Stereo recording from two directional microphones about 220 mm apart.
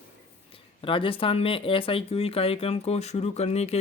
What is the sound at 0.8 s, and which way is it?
Speech, 25° left (ahead or behind).